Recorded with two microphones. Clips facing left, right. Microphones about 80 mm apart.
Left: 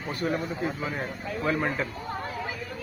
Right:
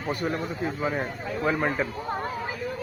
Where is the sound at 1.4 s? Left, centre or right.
Centre.